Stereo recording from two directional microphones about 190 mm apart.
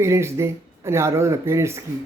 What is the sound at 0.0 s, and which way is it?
Speech, 15° right (ahead or behind).